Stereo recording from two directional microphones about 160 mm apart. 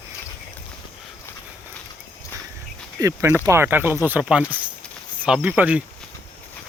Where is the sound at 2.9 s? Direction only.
20° right (ahead or behind).